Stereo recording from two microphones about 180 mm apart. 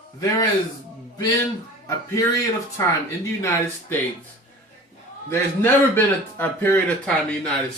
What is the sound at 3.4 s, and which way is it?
Speech, 15° left (ahead or behind).